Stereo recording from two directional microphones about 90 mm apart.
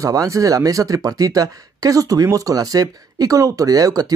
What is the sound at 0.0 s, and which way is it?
Speech, 40° right (ahead or behind).